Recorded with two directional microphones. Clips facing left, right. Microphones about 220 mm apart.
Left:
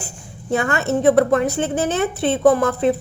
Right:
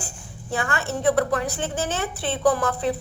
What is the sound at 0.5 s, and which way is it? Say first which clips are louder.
A woman's voice: left 7 dB; 20° left (ahead or behind).